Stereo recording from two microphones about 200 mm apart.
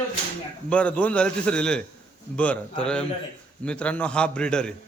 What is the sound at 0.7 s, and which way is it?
Speech, 5° left (ahead or behind).